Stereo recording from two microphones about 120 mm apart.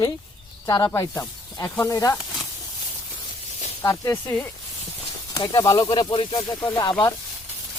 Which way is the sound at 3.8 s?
25° left (ahead or behind).